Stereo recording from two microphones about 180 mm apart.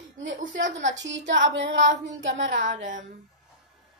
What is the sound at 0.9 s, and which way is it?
Child singing, 80° right.